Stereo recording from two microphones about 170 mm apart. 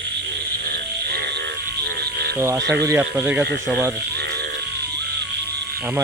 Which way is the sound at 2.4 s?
15° right (ahead or behind).